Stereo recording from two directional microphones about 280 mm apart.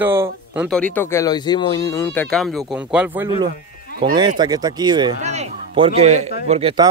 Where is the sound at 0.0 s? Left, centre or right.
Centre.